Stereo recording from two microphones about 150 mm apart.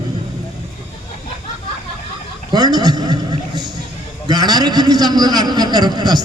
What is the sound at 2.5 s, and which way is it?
Speech, 25° right (ahead or behind).